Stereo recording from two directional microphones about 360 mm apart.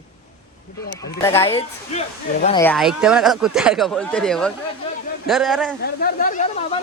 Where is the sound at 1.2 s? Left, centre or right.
Centre.